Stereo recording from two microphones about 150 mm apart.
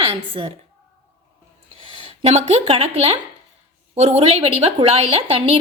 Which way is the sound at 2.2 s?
40° right (ahead or behind).